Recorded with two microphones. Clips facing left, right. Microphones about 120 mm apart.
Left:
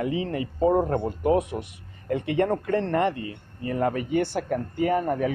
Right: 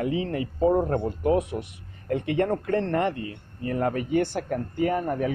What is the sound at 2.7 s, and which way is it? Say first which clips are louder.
Speech: left 1 dB; 10° left (ahead or behind).